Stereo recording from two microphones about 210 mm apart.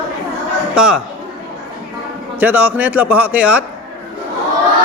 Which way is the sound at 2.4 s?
10° right (ahead or behind).